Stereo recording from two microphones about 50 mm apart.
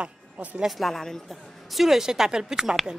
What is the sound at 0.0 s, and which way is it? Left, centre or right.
Speech, right.